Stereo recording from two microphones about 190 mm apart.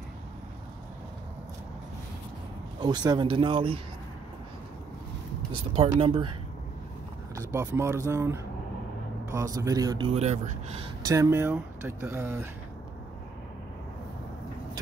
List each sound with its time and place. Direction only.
2.8 s speech: 20° right (ahead or behind)
5.8 s speech: 30° right (ahead or behind)
7.3 s speech: 15° right (ahead or behind); by 10.9 s 35° right (ahead or behind)
11.1 s speech: 15° right (ahead or behind)